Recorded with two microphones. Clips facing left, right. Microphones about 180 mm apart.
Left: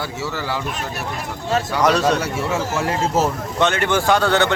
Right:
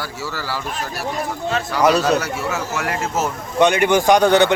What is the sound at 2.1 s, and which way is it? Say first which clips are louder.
Speech: left 1 dB; 30° left (ahead or behind).